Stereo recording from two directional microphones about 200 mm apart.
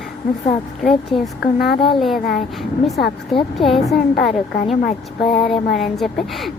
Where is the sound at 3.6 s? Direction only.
25° left (ahead or behind).